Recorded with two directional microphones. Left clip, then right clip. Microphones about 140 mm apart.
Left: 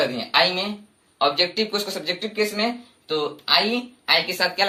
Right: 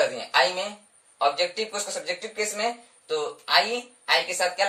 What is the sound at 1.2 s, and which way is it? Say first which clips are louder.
Speech: left 3 dB; 30° right (ahead or behind).